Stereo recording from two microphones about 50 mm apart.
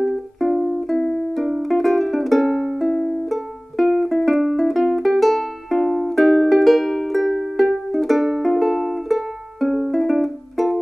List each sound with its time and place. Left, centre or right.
0.0 s music: centre